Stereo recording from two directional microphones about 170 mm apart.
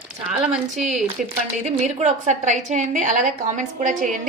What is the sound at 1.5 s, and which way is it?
A woman's voice, 45° right (ahead or behind).